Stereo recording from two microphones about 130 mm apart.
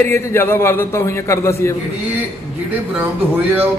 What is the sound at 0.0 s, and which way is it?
A man's voice, 15° left (ahead or behind).